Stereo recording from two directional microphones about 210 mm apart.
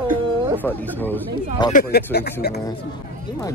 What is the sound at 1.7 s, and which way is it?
Speech, 45° left (ahead or behind).